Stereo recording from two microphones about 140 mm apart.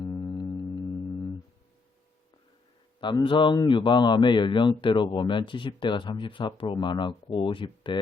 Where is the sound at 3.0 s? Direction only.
35° left (ahead or behind).